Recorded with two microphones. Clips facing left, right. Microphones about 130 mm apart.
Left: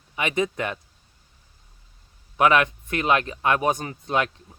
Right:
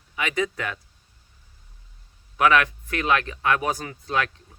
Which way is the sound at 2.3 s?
20° left (ahead or behind).